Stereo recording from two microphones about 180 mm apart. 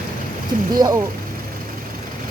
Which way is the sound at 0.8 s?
20° right (ahead or behind).